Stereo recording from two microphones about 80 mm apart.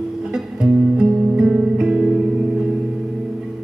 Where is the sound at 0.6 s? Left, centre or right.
Centre.